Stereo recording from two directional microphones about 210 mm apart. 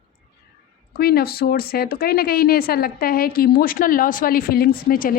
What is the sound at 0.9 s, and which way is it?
Speech, 45° left (ahead or behind).